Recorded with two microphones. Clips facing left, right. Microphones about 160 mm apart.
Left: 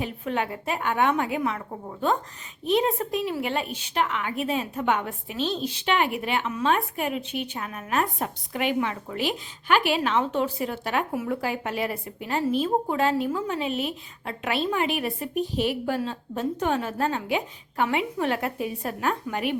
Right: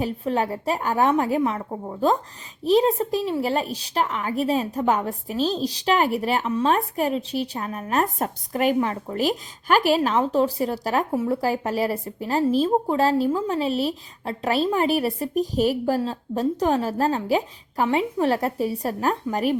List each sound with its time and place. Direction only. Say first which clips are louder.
0.0 s a woman's voice: right 4 dB; 35° right (ahead or behind)